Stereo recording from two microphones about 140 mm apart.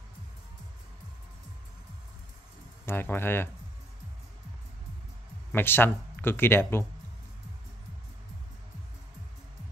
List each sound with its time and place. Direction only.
2.8 s speech: 15° left (ahead or behind)
5.5 s speech: 15° left (ahead or behind)